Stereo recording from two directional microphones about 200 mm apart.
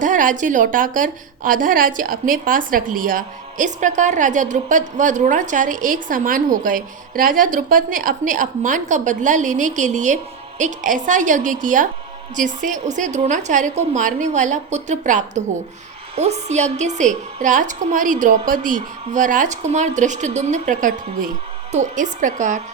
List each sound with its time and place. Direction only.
0.0 s a woman's voice: 40° right (ahead or behind)